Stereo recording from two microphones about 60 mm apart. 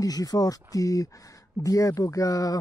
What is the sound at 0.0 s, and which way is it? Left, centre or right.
Speech, left.